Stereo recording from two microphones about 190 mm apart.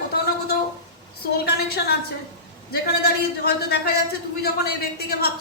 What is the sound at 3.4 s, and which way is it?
A woman's voice, 60° left (ahead or behind).